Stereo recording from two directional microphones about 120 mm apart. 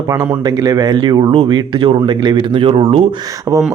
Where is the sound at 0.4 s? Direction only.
30° right (ahead or behind); by 3.0 s 50° right (ahead or behind).